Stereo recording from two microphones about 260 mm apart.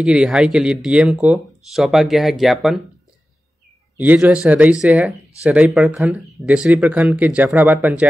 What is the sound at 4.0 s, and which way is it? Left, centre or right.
Speech, centre.